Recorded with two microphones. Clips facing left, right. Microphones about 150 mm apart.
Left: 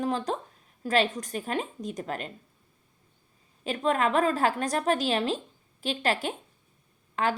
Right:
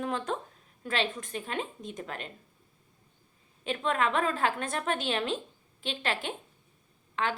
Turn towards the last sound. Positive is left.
turn(degrees=40)  # may be behind; listen again after turning